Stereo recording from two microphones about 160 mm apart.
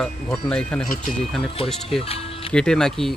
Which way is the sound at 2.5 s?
5° left (ahead or behind).